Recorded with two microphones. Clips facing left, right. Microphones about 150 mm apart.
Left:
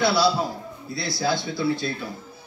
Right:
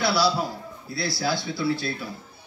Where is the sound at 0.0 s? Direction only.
25° left (ahead or behind).